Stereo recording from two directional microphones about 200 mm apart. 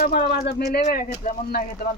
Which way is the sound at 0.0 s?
55° left (ahead or behind).